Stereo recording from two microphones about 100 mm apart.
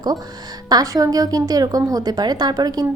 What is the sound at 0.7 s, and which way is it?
A woman's voice, 40° right (ahead or behind).